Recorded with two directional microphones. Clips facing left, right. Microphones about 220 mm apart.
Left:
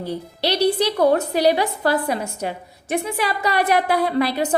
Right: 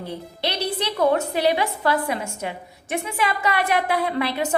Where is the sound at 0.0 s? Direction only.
35° left (ahead or behind).